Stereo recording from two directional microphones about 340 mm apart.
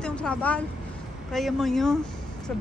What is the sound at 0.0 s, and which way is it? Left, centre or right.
Speech, centre.